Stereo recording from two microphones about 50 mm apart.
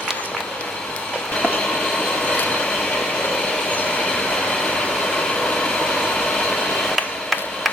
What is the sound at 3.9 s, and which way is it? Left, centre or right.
Vehicle, centre.